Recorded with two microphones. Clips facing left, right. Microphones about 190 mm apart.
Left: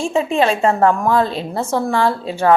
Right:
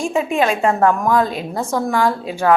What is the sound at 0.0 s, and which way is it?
Speech, 15° right (ahead or behind).